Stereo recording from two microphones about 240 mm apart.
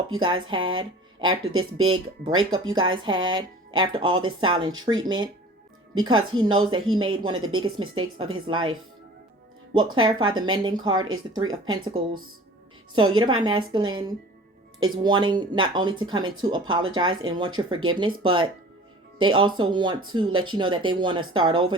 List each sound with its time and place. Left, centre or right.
0.2 s speech: centre
1.5 s speech: right
2.7 s a woman's voice: centre
9.7 s a woman's voice: centre